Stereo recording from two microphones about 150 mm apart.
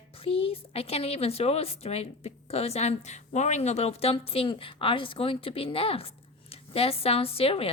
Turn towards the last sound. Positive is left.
turn(degrees=40)  # may be behind; listen again after turning